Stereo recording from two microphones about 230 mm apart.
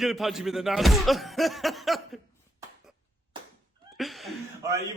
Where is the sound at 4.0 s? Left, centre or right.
Centre.